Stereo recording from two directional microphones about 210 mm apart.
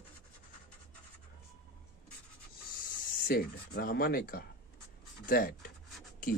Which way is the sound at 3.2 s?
45° left (ahead or behind).